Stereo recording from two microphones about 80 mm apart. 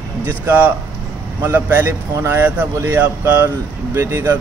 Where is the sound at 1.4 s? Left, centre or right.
Right.